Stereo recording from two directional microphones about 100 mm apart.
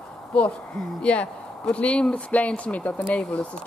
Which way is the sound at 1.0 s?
10° left (ahead or behind).